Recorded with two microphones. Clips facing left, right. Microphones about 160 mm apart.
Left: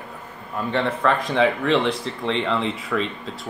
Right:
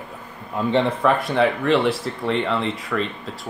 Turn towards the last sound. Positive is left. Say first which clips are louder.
# even
turn(degrees=0)  # may be behind; listen again after turning